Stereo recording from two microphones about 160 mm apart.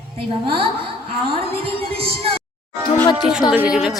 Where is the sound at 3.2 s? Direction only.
5° right (ahead or behind).